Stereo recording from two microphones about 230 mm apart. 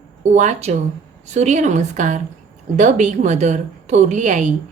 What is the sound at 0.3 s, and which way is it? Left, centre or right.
A woman's voice, right.